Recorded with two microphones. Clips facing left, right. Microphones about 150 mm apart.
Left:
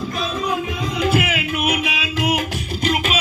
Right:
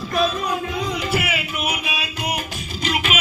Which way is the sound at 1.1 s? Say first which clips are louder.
Left 4 dB; 60° left (ahead or behind).